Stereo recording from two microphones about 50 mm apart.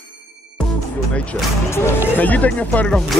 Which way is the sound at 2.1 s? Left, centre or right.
Left.